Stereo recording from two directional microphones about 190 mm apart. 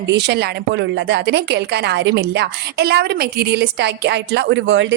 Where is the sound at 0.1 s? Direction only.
65° right (ahead or behind).